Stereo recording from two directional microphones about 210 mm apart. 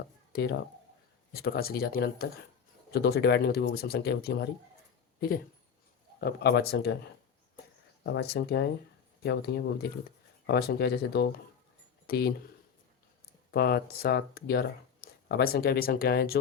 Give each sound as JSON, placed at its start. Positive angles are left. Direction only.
{"t": 1.3, "sound": "speech", "side_deg": 45}
{"t": 6.1, "sound": "speech", "side_deg": 50}
{"t": 8.0, "sound": "speech", "side_deg": 55}
{"t": 13.5, "sound": "speech", "side_deg": 50}